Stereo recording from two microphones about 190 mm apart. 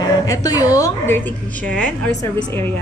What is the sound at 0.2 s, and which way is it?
A woman's voice, 20° left (ahead or behind).